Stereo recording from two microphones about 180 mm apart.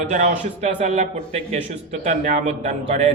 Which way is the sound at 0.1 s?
40° right (ahead or behind).